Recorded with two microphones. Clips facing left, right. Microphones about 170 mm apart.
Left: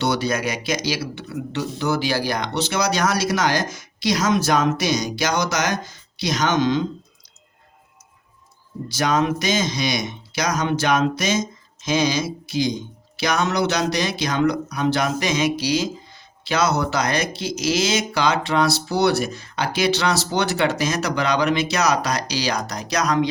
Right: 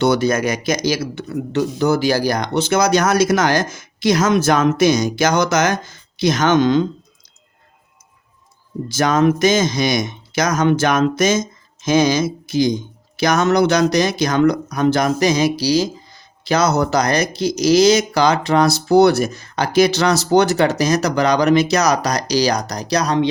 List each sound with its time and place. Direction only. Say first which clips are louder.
0.0 s speech: right 6 dB; 50° right (ahead or behind)
8.9 s speech: right 5 dB; 50° right (ahead or behind); by 23.2 s 30° right (ahead or behind)